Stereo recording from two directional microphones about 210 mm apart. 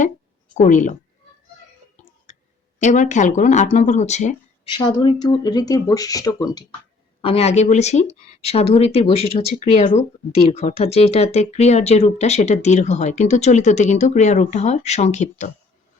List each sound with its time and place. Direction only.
0.5 s speech: 35° left (ahead or behind)
2.3 s a sound: 35° left (ahead or behind)
2.7 s speech: 35° left (ahead or behind)
4.7 s speech: 20° left (ahead or behind)